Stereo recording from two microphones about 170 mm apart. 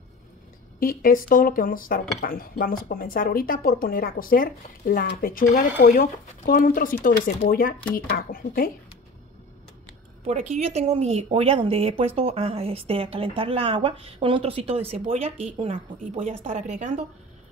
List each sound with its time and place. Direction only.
0.7 s speech: 60° left (ahead or behind)
10.2 s a woman's voice: 40° right (ahead or behind)